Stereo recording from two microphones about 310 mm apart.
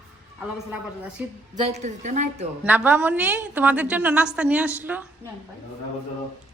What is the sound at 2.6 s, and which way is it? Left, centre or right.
A woman's voice, centre.